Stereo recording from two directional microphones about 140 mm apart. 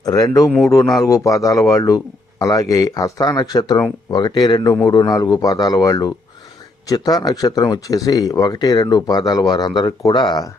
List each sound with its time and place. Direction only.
0.0 s speech: 25° left (ahead or behind)